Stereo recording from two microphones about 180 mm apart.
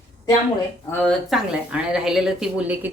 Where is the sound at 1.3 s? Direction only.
5° right (ahead or behind).